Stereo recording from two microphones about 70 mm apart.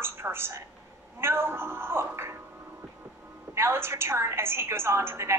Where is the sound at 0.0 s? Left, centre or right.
Right.